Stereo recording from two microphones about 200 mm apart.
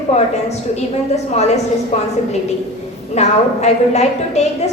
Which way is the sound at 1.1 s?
35° left (ahead or behind).